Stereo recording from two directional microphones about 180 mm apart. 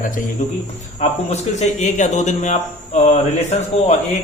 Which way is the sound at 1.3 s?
40° left (ahead or behind).